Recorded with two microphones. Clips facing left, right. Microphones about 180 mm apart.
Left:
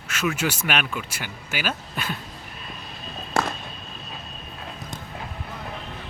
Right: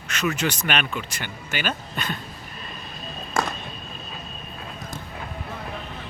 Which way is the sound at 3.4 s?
65° left (ahead or behind).